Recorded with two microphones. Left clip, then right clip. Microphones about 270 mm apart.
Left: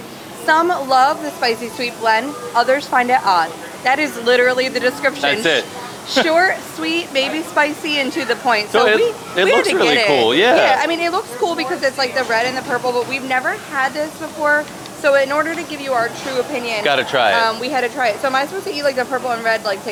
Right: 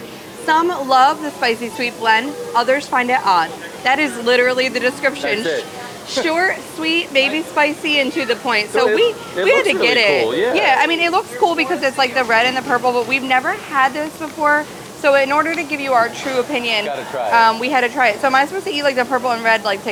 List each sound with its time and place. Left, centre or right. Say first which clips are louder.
0.4 s a woman's voice: left 1 dB; centre
10.2 s speech: left 4 dB; left
10.6 s speech: even; right
16.8 s speech: left 7 dB; left
17.3 s speech: right 4 dB; right